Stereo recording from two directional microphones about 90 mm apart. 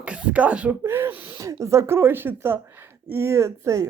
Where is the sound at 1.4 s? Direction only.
35° right (ahead or behind).